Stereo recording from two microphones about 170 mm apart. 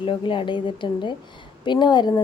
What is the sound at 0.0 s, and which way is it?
A woman's voice, 30° left (ahead or behind).